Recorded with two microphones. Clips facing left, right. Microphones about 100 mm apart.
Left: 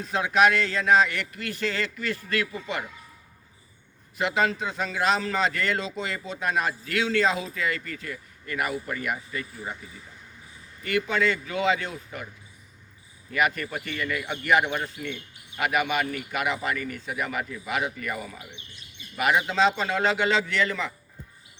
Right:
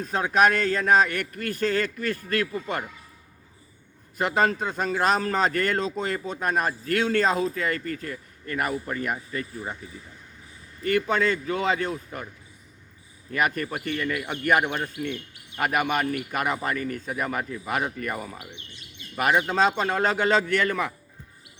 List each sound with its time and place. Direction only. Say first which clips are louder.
0.0 s a man's voice: even; 40° right (ahead or behind)
4.2 s a man's voice: right 2 dB; 45° right (ahead or behind)
10.8 s speech: right 2 dB; 40° right (ahead or behind)
13.3 s a man's voice: even; 40° right (ahead or behind)